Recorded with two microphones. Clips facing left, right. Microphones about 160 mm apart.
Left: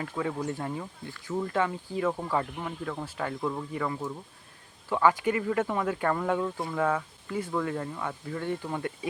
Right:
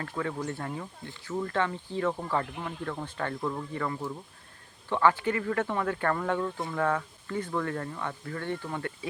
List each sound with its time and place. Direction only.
0.0 s speech: 10° left (ahead or behind)